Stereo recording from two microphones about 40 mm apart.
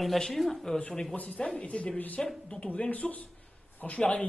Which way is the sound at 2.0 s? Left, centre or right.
Left.